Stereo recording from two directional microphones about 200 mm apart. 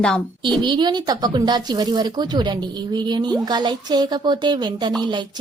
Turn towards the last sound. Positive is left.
turn(degrees=-20)  # may be behind; listen again after turning